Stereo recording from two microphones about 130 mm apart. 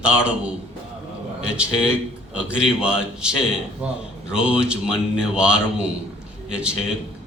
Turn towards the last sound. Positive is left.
turn(degrees=-5)  # may be behind; listen again after turning